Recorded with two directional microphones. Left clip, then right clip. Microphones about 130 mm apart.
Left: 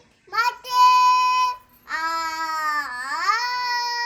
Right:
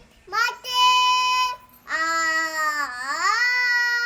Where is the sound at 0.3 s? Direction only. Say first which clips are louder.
Left 1 dB; 15° right (ahead or behind).